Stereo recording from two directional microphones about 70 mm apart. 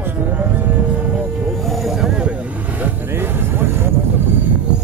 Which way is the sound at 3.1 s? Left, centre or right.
Right.